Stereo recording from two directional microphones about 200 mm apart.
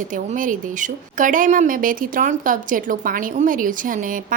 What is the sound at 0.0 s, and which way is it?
Speech, 40° right (ahead or behind).